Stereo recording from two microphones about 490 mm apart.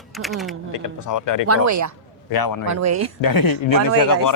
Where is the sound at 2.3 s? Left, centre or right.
Left.